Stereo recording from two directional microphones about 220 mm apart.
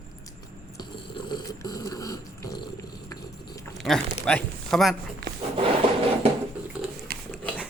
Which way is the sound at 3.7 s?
Centre (ahead or behind).